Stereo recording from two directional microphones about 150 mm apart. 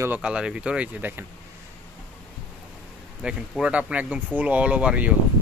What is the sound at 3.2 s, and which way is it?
Speech, 5° right (ahead or behind).